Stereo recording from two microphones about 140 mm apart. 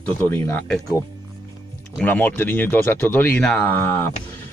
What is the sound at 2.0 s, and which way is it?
Speech, 10° left (ahead or behind).